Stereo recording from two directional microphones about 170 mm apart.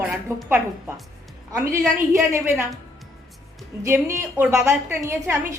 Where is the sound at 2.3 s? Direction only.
15° right (ahead or behind).